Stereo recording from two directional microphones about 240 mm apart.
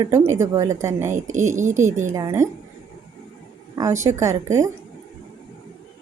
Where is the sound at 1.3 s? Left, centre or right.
Right.